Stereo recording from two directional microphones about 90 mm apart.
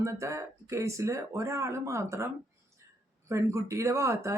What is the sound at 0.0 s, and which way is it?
Speech, 35° right (ahead or behind).